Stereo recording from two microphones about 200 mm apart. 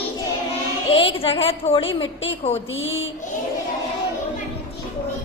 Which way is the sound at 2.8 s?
70° left (ahead or behind).